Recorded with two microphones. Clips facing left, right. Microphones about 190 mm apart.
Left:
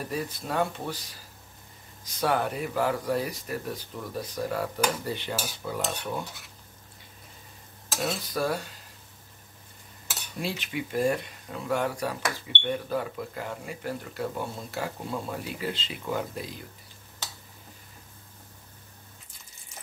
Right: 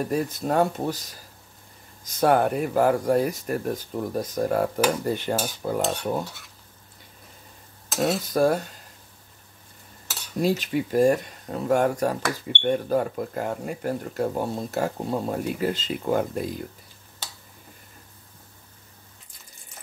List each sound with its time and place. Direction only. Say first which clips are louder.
0.1 s speech: right 5 dB; 45° right (ahead or behind)
8.0 s speech: right 8 dB; 45° right (ahead or behind)
10.4 s speech: right 9 dB; 40° right (ahead or behind)